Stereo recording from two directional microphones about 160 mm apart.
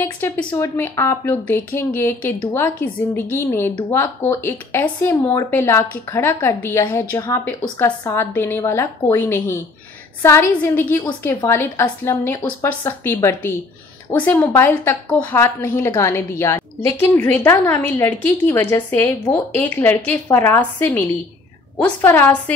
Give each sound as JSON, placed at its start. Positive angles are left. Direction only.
{"t": 0.0, "sound": "a woman's voice", "side_deg": 15}